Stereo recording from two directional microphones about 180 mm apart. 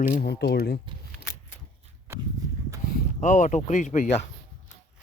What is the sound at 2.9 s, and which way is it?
Speech, 50° left (ahead or behind).